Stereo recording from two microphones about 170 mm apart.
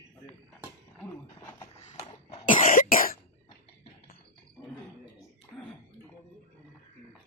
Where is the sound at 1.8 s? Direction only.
40° left (ahead or behind).